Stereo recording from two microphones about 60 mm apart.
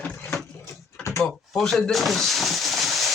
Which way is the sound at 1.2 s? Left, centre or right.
Centre.